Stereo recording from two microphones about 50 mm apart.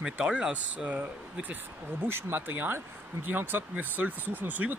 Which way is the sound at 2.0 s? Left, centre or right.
Right.